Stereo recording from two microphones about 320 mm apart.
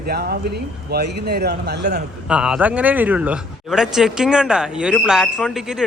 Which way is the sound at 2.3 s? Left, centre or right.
Centre.